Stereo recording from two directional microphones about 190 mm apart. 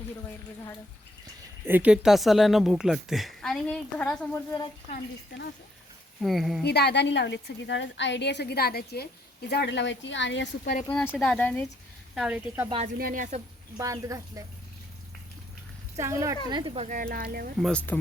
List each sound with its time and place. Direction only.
1.6 s speech: 10° right (ahead or behind)
6.2 s speech: centre (ahead or behind)
6.6 s a woman's voice: 60° left (ahead or behind)
10.8 s speech: 10° left (ahead or behind)
12.1 s speech: 5° right (ahead or behind)
13.0 s speech: 45° right (ahead or behind)
13.7 s a woman's voice: 15° right (ahead or behind)
16.0 s a woman's voice: 15° right (ahead or behind); by 17.5 s 50° right (ahead or behind)
17.6 s speech: 5° left (ahead or behind)